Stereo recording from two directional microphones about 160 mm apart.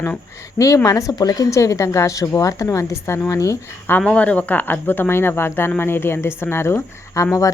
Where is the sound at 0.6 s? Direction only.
20° left (ahead or behind).